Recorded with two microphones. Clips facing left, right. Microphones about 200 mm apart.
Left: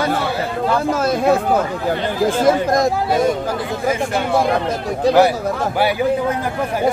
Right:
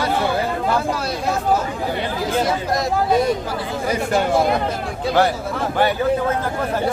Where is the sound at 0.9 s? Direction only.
50° left (ahead or behind).